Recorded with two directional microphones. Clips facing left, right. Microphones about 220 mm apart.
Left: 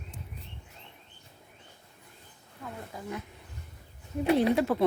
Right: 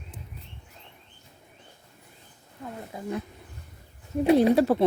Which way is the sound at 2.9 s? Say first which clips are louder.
Right 6 dB; 25° right (ahead or behind).